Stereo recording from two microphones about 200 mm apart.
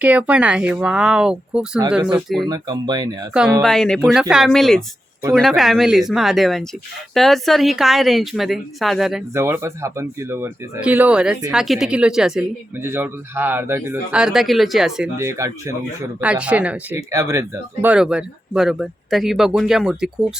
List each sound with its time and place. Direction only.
0.0 s speech: 5° right (ahead or behind)
2.5 s speech: 20° right (ahead or behind)
3.6 s speech: centre (ahead or behind)
9.3 s speech: 15° right (ahead or behind)
15.2 s speech: 15° right (ahead or behind)